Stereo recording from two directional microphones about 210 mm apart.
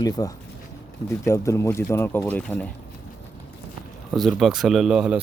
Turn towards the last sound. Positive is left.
turn(degrees=-5)  # may be behind; listen again after turning